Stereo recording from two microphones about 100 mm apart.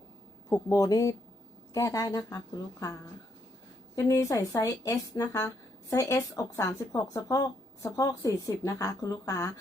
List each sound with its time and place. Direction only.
0.5 s speech: 35° left (ahead or behind)
3.9 s speech: 30° left (ahead or behind)